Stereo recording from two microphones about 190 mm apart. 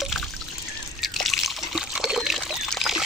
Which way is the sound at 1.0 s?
Centre (ahead or behind).